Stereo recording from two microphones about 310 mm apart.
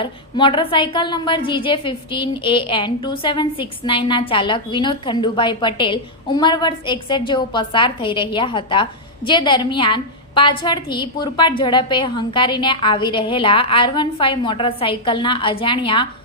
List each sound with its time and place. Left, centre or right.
0.0 s a woman's voice: centre